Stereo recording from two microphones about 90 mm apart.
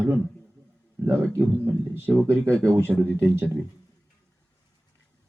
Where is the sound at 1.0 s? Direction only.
30° right (ahead or behind).